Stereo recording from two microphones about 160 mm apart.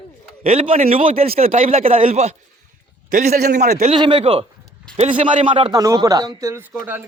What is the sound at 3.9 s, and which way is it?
A man's voice, 30° right (ahead or behind).